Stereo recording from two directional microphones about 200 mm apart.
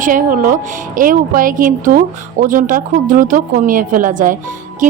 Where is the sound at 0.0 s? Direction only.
40° right (ahead or behind).